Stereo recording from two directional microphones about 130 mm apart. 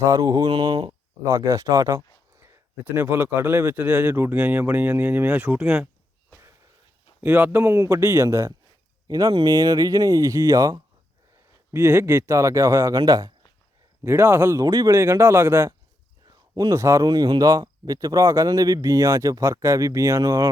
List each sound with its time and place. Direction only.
0.0 s speech: 25° right (ahead or behind)
1.3 s speech: 25° right (ahead or behind)
7.2 s speech: 15° right (ahead or behind)